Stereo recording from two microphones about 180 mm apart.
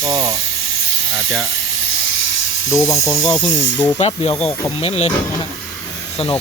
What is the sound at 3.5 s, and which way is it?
Speech, 90° left.